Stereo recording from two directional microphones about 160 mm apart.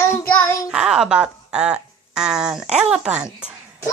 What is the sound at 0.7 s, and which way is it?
Speech, 5° right (ahead or behind).